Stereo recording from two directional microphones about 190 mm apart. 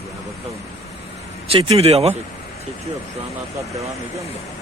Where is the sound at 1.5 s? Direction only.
30° right (ahead or behind).